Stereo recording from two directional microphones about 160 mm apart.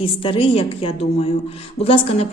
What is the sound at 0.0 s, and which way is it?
A woman's voice, 35° left (ahead or behind).